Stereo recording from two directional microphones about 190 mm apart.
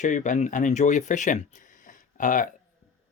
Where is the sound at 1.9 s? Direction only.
40° left (ahead or behind).